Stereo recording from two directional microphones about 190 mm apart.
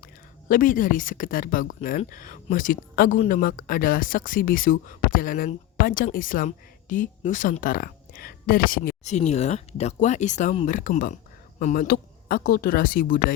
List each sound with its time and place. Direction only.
0.0 s speech: 45° left (ahead or behind)